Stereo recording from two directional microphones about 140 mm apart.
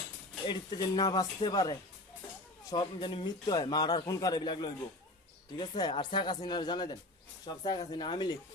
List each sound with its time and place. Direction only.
0.4 s a man's voice: 30° left (ahead or behind)